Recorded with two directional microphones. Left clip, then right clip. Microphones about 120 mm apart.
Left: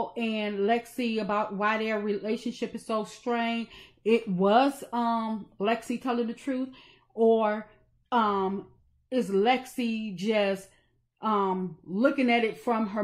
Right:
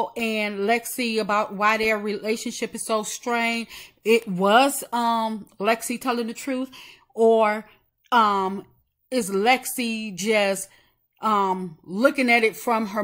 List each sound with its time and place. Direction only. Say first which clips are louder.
0.1 s a woman's voice: right 6 dB; 30° right (ahead or behind)